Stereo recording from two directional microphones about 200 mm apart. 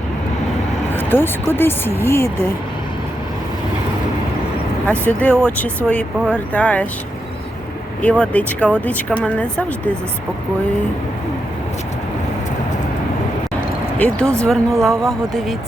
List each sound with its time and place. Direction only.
0.9 s speech: 10° left (ahead or behind)
4.9 s speech: 5° left (ahead or behind)
8.0 s speech: 5° left (ahead or behind)
14.0 s speech: 5° left (ahead or behind)